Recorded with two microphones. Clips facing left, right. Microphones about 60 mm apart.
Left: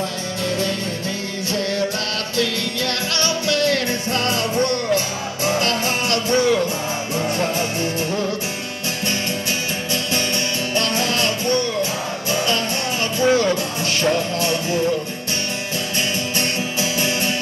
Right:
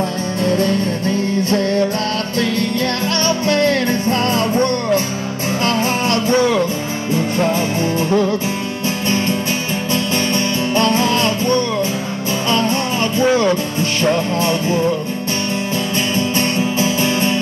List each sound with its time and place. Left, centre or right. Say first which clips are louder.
0.4 s music: right 7 dB; right
10.7 s music: right 7 dB; right
13.2 s music: right 2 dB; right
16.2 s music: right 6 dB; right